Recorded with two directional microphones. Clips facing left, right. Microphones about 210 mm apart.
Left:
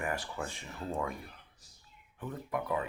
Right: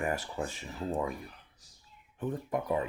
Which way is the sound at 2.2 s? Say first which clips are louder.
Right 4 dB; 30° right (ahead or behind).